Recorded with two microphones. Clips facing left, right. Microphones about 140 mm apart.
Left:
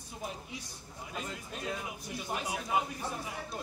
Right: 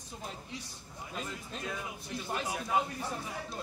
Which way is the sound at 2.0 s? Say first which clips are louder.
Right 2 dB; 15° left (ahead or behind).